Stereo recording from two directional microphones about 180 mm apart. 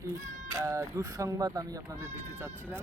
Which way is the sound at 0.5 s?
15° right (ahead or behind).